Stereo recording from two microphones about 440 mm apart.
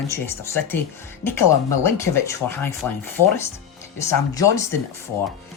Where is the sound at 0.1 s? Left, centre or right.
Centre.